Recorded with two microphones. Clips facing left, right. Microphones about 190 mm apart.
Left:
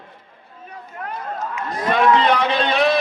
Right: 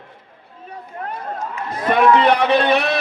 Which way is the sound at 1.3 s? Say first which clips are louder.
Even; centre (ahead or behind).